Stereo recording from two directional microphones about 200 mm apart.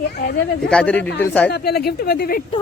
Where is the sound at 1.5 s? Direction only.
50° left (ahead or behind).